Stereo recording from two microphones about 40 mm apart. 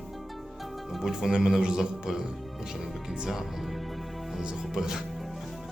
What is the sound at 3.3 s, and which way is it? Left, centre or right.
Music, centre.